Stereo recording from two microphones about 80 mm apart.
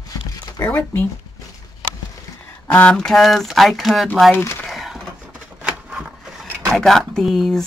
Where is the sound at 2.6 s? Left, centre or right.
Centre.